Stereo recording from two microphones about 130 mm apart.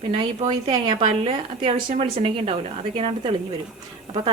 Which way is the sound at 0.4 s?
35° right (ahead or behind).